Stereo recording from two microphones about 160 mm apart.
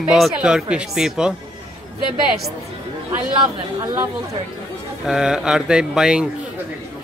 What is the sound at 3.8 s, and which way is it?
Speech, 15° right (ahead or behind).